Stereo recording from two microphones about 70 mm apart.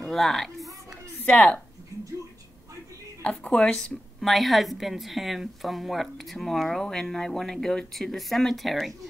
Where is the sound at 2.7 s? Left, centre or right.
Right.